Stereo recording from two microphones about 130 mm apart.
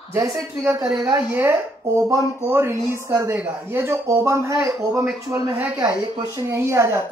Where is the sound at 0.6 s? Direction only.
10° right (ahead or behind).